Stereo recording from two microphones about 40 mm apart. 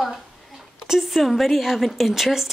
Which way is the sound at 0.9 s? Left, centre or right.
Centre.